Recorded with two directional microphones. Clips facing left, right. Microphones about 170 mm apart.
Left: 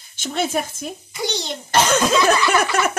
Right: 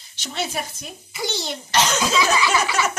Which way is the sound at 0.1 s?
50° left (ahead or behind).